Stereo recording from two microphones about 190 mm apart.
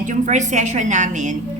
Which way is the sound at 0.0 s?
40° right (ahead or behind).